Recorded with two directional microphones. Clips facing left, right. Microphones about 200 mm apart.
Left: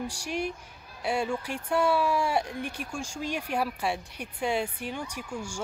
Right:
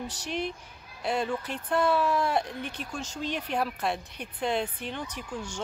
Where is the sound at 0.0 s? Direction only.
10° left (ahead or behind).